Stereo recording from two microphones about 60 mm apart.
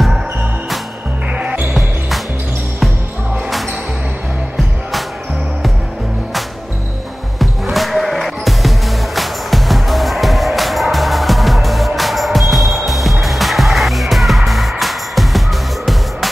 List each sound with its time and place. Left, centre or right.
1.4 s basketball bounce: right
1.7 s basketball bounce: centre
7.3 s music: centre